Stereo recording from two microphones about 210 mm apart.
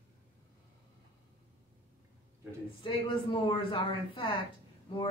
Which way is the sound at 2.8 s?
25° left (ahead or behind).